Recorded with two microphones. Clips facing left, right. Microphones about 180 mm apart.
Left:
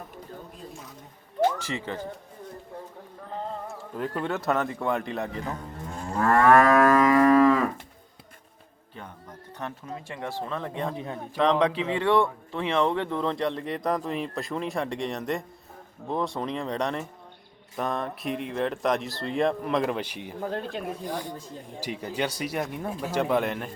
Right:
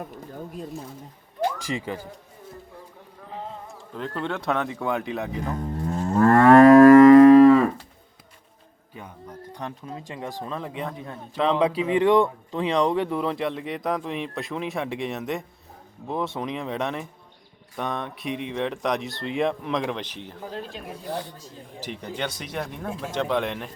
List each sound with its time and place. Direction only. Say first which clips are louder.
1.4 s speech: left 2 dB; 15° right (ahead or behind)
3.9 s speech: even; 5° left (ahead or behind)
6.1 s moo: right 5 dB; 30° right (ahead or behind)
9.5 s speech: even; 15° right (ahead or behind)
10.8 s a man's voice: left 2 dB; 20° left (ahead or behind)
11.4 s speech: right 1 dB; 5° right (ahead or behind); by 20.3 s 10° left (ahead or behind)
20.5 s speech: left 3 dB; 60° left (ahead or behind)
21.1 s speech: right 1 dB; 10° left (ahead or behind)